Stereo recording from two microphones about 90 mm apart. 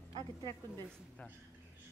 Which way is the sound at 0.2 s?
55° right (ahead or behind).